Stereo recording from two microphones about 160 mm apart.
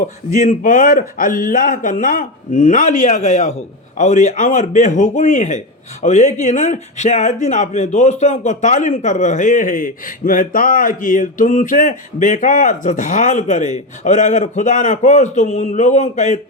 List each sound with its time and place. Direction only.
0.0 s a man's voice: 50° left (ahead or behind)